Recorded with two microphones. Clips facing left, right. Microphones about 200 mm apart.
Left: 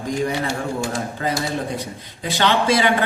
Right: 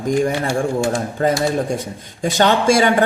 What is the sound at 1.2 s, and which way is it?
Speech, 45° right (ahead or behind).